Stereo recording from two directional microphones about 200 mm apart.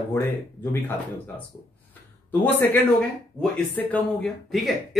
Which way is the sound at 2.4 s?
10° left (ahead or behind).